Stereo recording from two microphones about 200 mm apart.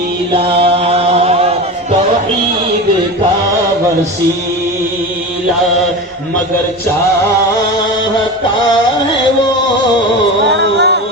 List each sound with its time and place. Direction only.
0.3 s mantra: 30° right (ahead or behind)
10.5 s music: 55° right (ahead or behind)